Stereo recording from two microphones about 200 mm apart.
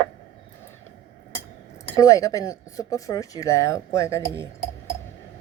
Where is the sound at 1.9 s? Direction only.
15° left (ahead or behind).